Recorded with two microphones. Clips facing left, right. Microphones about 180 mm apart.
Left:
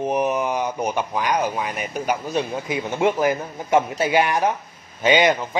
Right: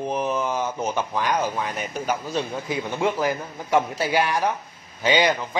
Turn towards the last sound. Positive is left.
turn(degrees=20)  # may be behind; listen again after turning